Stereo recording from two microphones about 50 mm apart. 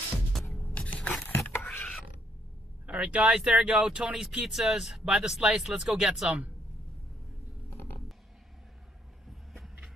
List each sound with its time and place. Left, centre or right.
0.3 s music: centre
0.7 s scrape: left
1.3 s a sound: left
2.9 s speech: right